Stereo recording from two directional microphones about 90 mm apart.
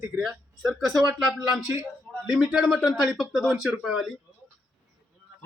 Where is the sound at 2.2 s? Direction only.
5° right (ahead or behind).